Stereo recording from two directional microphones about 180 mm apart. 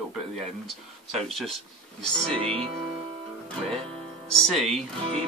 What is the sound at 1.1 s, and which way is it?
Speech, centre (ahead or behind).